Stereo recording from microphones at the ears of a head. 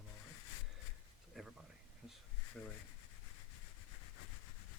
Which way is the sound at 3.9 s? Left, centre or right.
Left.